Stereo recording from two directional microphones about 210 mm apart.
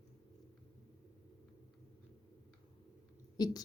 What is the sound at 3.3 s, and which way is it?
Speech, 20° left (ahead or behind).